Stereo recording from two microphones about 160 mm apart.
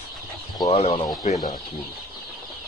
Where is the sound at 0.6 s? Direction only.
40° left (ahead or behind).